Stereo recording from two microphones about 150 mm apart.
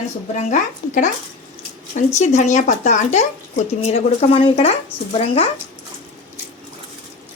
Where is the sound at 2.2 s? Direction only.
50° left (ahead or behind).